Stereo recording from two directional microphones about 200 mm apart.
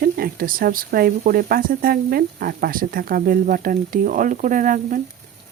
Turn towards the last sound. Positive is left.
turn(degrees=-40)  # may be behind; listen again after turning